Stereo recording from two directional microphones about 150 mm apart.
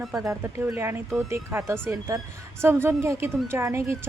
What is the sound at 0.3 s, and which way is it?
A woman's voice, 20° right (ahead or behind).